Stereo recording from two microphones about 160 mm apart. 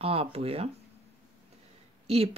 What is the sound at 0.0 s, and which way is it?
Speech, 35° right (ahead or behind).